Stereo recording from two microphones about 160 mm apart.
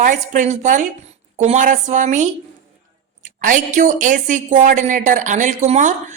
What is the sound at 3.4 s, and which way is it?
A woman's voice, 55° right (ahead or behind).